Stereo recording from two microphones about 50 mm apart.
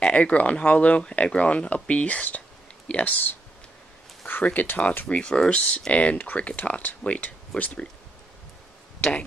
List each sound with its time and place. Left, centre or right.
0.0 s speech: left
4.6 s speech: left
5.0 s speech: centre